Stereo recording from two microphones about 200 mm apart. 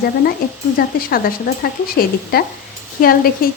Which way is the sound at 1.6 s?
50° left (ahead or behind).